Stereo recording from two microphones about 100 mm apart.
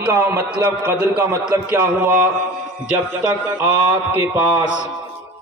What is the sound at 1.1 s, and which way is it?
A man's voice, 30° right (ahead or behind).